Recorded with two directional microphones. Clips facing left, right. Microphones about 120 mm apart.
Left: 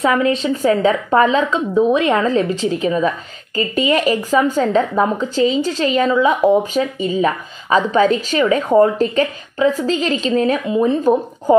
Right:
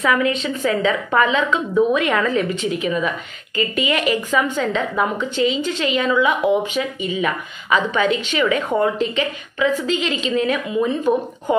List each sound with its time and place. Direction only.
0.0 s speech: 30° left (ahead or behind)